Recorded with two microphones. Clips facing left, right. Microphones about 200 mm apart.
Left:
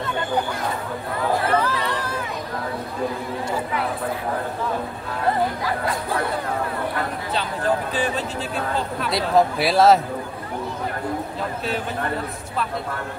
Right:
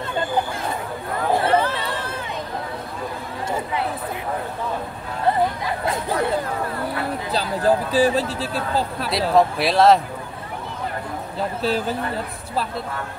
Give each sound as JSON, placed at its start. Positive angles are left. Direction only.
{"t": 1.4, "sound": "chatter", "side_deg": -25}
{"t": 7.3, "sound": "speech", "side_deg": -35}
{"t": 9.1, "sound": "speech", "side_deg": 0}